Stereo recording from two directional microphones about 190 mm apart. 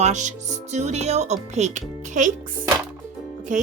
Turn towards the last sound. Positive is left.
turn(degrees=-40)  # may be behind; listen again after turning